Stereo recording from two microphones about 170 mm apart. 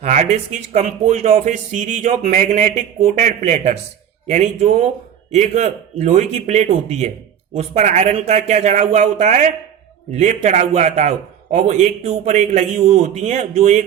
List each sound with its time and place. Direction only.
0.0 s a man's voice: 45° right (ahead or behind)